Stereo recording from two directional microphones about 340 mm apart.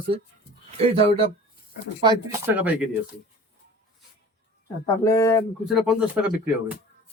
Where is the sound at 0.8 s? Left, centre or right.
Centre.